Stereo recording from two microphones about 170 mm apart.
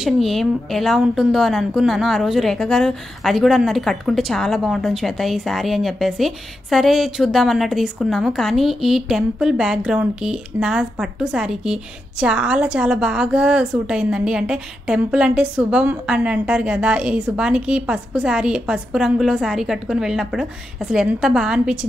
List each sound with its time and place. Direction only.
0.0 s a woman's voice: centre (ahead or behind)